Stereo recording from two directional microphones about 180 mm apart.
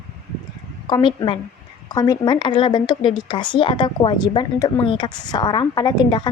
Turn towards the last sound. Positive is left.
turn(degrees=25)  # may be behind; listen again after turning